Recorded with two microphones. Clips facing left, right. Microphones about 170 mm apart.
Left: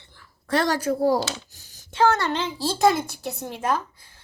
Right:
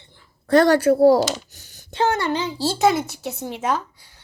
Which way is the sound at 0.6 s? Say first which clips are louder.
Right 7 dB; 65° right (ahead or behind).